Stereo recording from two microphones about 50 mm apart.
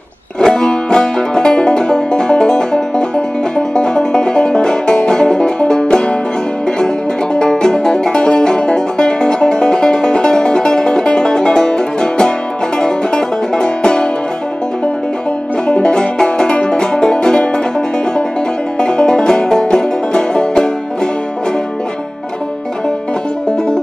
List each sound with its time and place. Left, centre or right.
0.4 s music: centre
7.3 s music: centre
15.6 s music: centre
18.8 s music: centre